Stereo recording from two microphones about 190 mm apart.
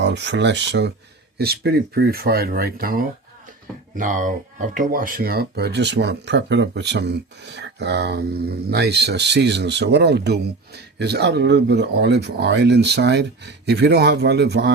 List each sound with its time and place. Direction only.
0.0 s speech: 65° right (ahead or behind)